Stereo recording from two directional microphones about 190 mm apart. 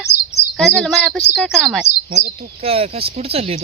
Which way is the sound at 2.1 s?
40° right (ahead or behind).